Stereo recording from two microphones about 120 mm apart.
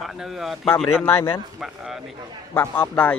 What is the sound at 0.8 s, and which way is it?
Speech, 15° left (ahead or behind).